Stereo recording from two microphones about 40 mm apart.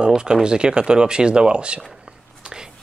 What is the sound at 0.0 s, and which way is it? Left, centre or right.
Speech, centre.